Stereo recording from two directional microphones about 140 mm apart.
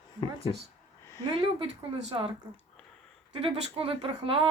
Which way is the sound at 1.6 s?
40° right (ahead or behind).